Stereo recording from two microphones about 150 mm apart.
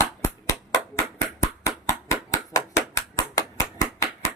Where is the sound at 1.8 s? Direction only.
25° left (ahead or behind).